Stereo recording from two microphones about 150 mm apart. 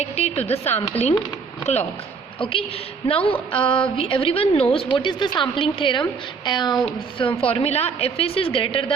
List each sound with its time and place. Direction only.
0.0 s speech: 45° left (ahead or behind)
2.4 s a woman's voice: 35° left (ahead or behind)